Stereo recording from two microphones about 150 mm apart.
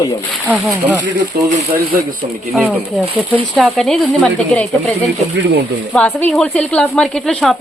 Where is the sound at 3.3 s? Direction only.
10° right (ahead or behind).